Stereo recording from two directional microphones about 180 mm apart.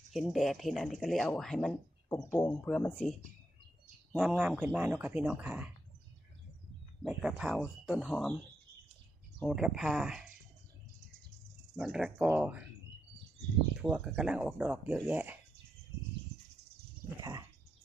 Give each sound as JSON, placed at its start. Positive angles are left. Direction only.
{"t": 0.1, "sound": "speech", "side_deg": 0}
{"t": 7.0, "sound": "speech", "side_deg": -5}
{"t": 9.4, "sound": "speech", "side_deg": 0}
{"t": 11.8, "sound": "speech", "side_deg": -5}
{"t": 13.8, "sound": "speech", "side_deg": -5}
{"t": 17.2, "sound": "a sound", "side_deg": -20}